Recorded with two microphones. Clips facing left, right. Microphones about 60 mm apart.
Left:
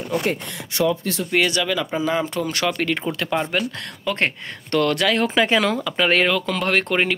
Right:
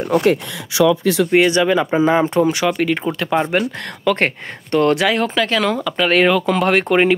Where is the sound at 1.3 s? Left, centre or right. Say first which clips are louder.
Right 5 dB; right.